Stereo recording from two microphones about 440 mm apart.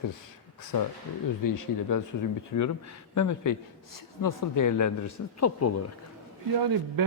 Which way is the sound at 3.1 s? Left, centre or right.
Left.